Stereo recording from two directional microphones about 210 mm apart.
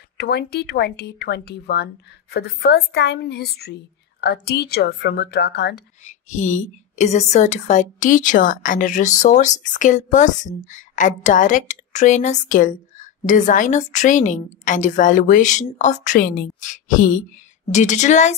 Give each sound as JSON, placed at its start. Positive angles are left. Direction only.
{"t": 0.2, "sound": "a woman's voice", "side_deg": 50}
{"t": 6.0, "sound": "a woman's voice", "side_deg": 35}
{"t": 16.2, "sound": "a woman's voice", "side_deg": 45}